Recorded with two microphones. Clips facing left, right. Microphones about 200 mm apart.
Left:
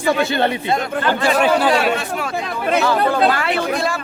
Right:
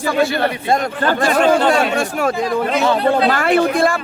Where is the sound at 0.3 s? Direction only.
25° left (ahead or behind).